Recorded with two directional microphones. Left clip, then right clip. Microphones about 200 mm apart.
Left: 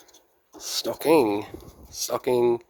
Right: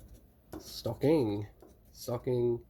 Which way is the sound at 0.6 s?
30° left (ahead or behind).